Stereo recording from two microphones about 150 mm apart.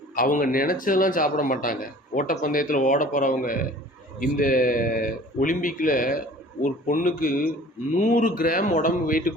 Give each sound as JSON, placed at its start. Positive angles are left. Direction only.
{"t": 0.2, "sound": "a man's voice", "side_deg": 65}